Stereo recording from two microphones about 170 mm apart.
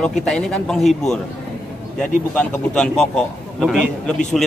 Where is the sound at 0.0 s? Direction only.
5° left (ahead or behind).